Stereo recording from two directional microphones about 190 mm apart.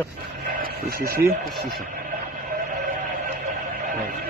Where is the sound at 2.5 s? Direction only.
45° right (ahead or behind).